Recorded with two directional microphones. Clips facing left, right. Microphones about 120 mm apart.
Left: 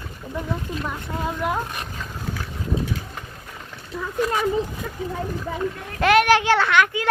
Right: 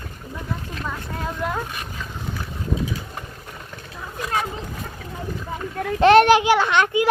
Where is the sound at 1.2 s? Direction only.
10° left (ahead or behind).